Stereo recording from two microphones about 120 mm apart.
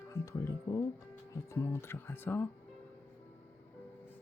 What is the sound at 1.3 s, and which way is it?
Speech, 25° left (ahead or behind).